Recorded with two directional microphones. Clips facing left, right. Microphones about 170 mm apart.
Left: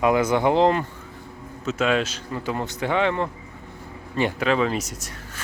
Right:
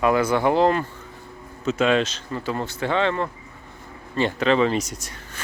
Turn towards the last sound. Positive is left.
turn(degrees=0)  # may be behind; listen again after turning